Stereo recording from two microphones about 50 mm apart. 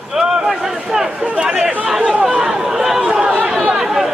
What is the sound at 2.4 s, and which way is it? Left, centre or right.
Chatter, centre.